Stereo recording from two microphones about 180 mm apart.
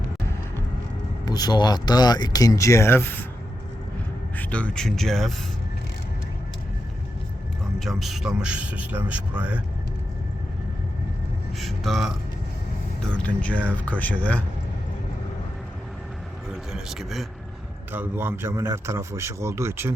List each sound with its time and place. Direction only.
1.2 s speech: 20° left (ahead or behind)
4.4 s speech: 5° left (ahead or behind)
7.8 s speech: centre (ahead or behind)
11.6 s a sound: centre (ahead or behind)
13.0 s speech: 5° left (ahead or behind)
16.7 s speech: centre (ahead or behind)
17.9 s speech: 10° right (ahead or behind)